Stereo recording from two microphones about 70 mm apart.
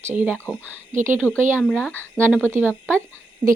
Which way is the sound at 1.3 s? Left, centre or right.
Left.